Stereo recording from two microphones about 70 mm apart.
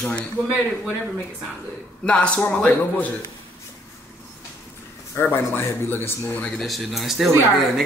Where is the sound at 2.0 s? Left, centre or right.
Centre.